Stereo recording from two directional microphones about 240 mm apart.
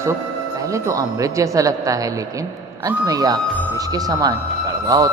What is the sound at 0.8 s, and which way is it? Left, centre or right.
A man's voice, centre.